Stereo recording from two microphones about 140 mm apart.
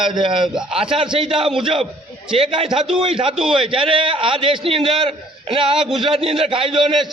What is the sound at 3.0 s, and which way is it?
Speech, 40° right (ahead or behind).